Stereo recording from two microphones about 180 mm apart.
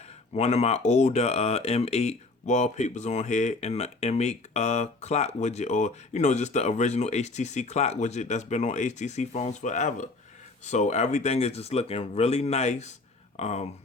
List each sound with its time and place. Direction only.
0.3 s speech: 35° left (ahead or behind)